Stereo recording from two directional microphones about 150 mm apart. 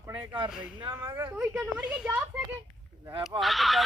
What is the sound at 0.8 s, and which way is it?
Speech, 20° right (ahead or behind).